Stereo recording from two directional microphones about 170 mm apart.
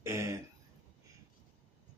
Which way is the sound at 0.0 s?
15° right (ahead or behind).